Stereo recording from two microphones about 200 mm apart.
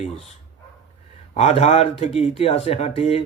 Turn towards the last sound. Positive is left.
turn(degrees=30)  # may be behind; listen again after turning